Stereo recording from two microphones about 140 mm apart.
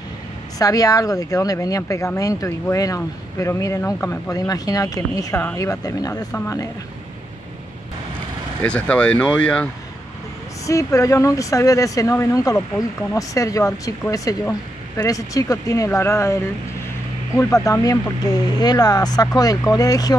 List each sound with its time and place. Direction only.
0.6 s speech: 25° left (ahead or behind)
8.6 s speech: 10° left (ahead or behind)
10.7 s speech: 20° left (ahead or behind)